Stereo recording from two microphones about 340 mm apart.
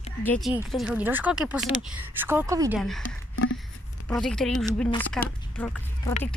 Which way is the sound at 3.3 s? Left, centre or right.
Left.